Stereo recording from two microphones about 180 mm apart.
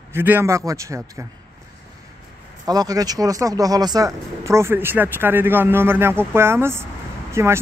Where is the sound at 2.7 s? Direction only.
20° right (ahead or behind).